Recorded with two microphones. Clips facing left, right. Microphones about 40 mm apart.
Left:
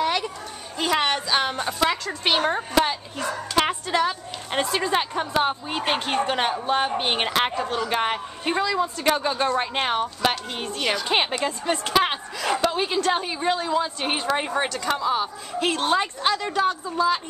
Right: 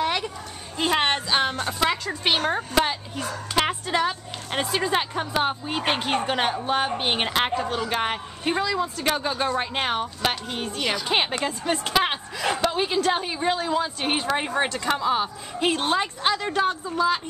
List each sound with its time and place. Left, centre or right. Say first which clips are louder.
0.0 s a sound: left 1 dB; centre
0.7 s a woman's voice: even; centre
1.7 s a woman's voice: left 1 dB; centre
14.7 s a woman's voice: even; centre